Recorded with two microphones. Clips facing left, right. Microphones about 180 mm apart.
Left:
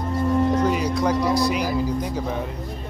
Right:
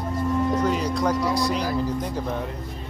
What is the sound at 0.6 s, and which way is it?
Music, 5° left (ahead or behind).